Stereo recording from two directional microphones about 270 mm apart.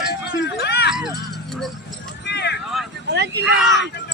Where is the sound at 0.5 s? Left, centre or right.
Left.